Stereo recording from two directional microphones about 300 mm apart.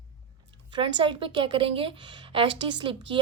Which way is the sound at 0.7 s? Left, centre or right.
Centre.